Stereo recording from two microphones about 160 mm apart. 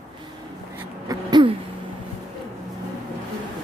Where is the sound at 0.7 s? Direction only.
25° right (ahead or behind).